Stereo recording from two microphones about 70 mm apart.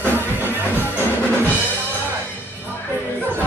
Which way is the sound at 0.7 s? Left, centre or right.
Left.